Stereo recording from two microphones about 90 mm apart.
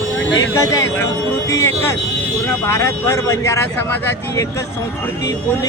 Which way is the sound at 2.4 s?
35° left (ahead or behind).